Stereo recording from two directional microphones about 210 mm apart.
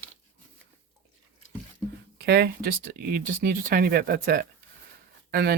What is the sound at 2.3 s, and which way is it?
Speech, 45° right (ahead or behind).